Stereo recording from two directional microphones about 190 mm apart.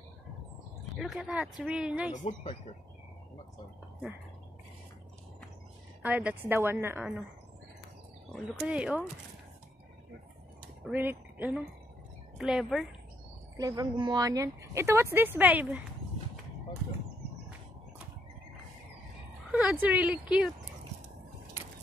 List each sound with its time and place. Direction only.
0.9 s speech: centre (ahead or behind)
2.1 s speech: 35° left (ahead or behind)
6.0 s speech: 10° right (ahead or behind)
8.3 s speech: 5° right (ahead or behind)
10.8 s speech: 10° right (ahead or behind)
13.6 s speech: 20° right (ahead or behind)
19.5 s speech: 5° right (ahead or behind)